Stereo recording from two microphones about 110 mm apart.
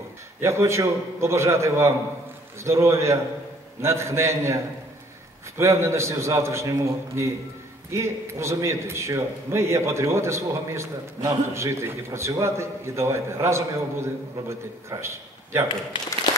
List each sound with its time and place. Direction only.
0.4 s a man's voice: 25° right (ahead or behind)
5.6 s a man's voice: 25° right (ahead or behind)